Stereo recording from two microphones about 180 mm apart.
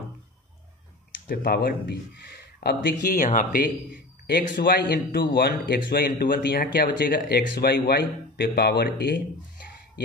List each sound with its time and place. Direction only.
1.2 s speech: 60° left (ahead or behind)